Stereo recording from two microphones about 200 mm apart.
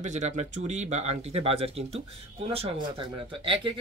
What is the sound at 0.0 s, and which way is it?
Speech, 35° right (ahead or behind).